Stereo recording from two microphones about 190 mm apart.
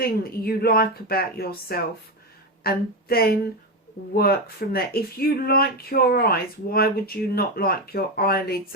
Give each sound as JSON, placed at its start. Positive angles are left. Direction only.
{"t": 0.0, "sound": "speech", "side_deg": 50}